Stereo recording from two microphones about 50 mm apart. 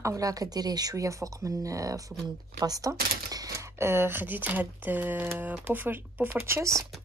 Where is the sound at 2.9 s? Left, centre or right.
Right.